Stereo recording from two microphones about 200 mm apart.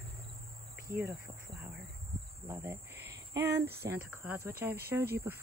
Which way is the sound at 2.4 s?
15° right (ahead or behind).